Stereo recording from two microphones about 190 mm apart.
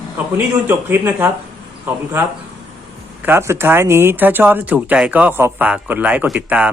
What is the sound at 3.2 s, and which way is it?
Speech, 15° right (ahead or behind).